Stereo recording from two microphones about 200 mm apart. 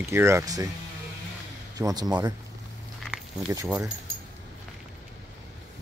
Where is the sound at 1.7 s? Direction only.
20° right (ahead or behind).